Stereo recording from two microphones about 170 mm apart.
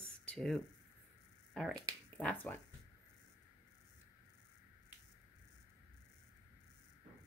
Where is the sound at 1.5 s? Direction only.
5° left (ahead or behind).